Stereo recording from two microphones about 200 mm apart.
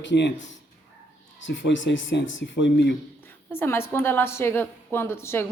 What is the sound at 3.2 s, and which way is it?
A woman's voice, 10° left (ahead or behind).